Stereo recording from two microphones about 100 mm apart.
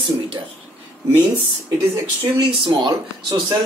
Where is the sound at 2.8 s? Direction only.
40° right (ahead or behind).